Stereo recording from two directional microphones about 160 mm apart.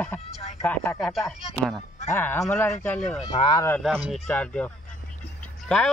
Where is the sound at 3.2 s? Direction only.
30° left (ahead or behind).